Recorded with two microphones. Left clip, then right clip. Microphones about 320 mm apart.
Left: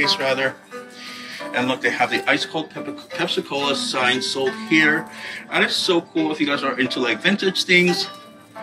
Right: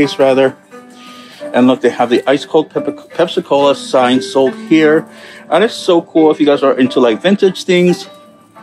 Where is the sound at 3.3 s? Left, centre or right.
Centre.